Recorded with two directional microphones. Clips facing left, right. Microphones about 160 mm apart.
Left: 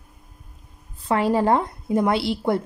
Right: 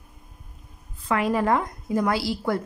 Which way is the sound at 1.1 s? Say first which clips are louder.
Left 3 dB; 30° left (ahead or behind).